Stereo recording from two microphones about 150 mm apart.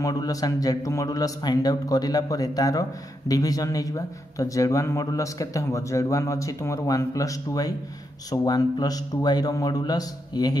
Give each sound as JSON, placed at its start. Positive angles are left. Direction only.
{"t": 0.0, "sound": "speech", "side_deg": 25}